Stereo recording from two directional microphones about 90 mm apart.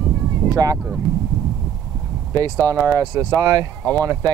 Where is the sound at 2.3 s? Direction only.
40° right (ahead or behind).